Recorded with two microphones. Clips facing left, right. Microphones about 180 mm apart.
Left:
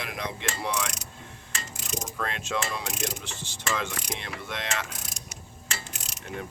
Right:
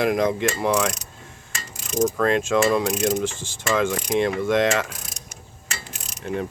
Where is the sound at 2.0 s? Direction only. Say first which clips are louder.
Right 16 dB; 55° right (ahead or behind).